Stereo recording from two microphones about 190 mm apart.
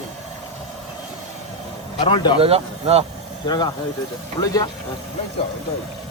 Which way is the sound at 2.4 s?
30° right (ahead or behind).